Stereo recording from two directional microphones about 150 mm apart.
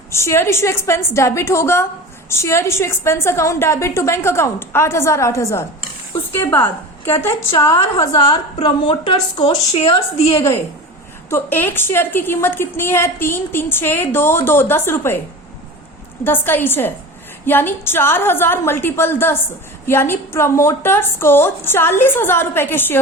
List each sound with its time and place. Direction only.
0.1 s a woman's voice: 20° left (ahead or behind)
8.1 s a woman's voice: 40° left (ahead or behind)
11.3 s a woman's voice: 15° left (ahead or behind)
16.2 s a woman's voice: 15° left (ahead or behind)